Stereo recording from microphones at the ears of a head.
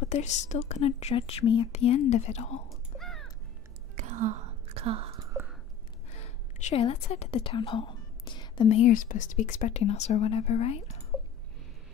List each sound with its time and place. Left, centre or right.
0.0 s a woman's voice: left
3.9 s whispering: right
6.6 s a woman's voice: left